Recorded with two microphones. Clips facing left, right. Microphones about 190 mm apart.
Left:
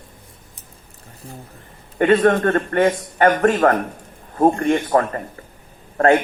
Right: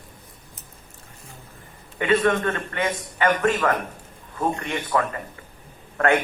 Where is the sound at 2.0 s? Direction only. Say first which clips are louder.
Left 6 dB; 45° left (ahead or behind).